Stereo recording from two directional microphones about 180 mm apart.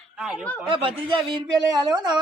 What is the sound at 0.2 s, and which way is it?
Speech, 5° right (ahead or behind).